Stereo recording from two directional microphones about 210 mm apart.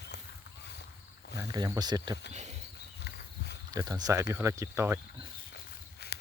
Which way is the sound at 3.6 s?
20° right (ahead or behind).